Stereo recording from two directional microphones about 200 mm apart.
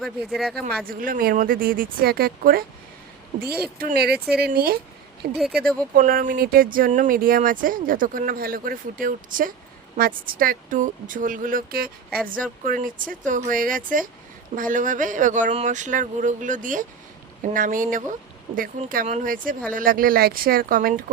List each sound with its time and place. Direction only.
0.0 s speech: centre (ahead or behind)
0.9 s speech: 45° right (ahead or behind)
3.8 s speech: 50° right (ahead or behind)